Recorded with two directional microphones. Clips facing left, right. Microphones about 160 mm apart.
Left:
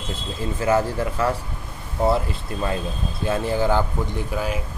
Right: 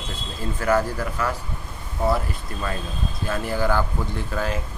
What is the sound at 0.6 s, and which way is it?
Speech, 20° left (ahead or behind).